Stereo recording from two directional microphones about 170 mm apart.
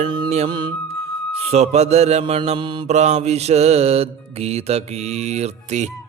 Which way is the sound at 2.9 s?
40° right (ahead or behind).